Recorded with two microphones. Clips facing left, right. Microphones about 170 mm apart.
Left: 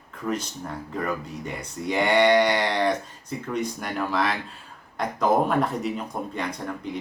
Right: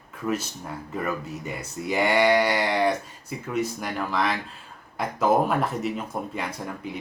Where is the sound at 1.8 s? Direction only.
5° right (ahead or behind).